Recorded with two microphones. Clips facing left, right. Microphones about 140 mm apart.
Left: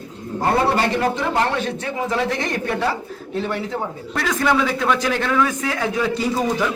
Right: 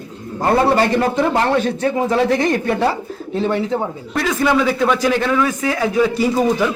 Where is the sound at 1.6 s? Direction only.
40° right (ahead or behind).